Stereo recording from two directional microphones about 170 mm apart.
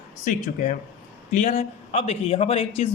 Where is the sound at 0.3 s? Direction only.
45° left (ahead or behind).